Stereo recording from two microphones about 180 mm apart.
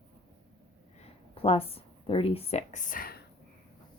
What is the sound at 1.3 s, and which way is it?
A woman's voice, 35° left (ahead or behind).